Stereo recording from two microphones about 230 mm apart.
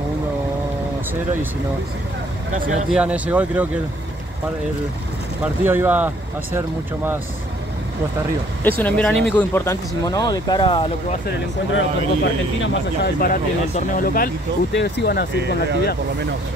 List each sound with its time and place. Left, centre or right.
2.5 s speech: right
2.9 s speech: centre
5.4 s speech: centre
8.6 s speech: centre
11.7 s speech: left
13.7 s speech: left
15.3 s speech: right